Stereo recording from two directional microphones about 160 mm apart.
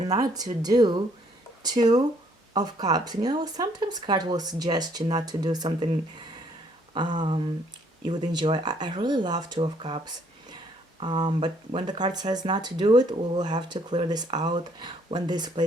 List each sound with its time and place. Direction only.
0.2 s speech: 25° right (ahead or behind)
6.9 s speech: 30° right (ahead or behind)
11.0 s speech: 30° right (ahead or behind)